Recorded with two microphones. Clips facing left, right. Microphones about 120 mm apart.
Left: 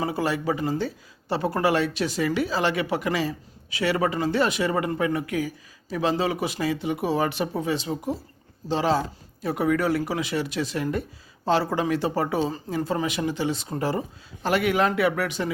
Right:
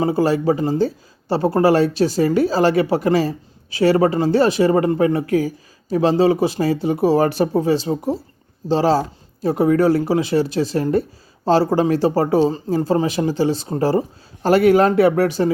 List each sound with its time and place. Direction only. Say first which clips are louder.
0.0 s speech: right 8 dB; 30° right (ahead or behind)